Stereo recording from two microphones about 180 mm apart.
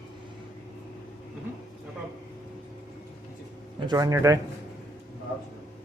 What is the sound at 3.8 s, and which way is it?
Speech, 20° right (ahead or behind).